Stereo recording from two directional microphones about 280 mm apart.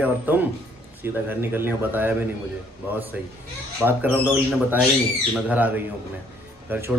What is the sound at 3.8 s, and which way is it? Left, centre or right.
Speech, centre.